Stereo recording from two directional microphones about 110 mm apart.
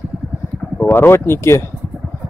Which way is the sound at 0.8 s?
20° left (ahead or behind).